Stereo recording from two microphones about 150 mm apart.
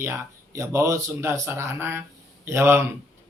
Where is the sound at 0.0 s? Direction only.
20° right (ahead or behind).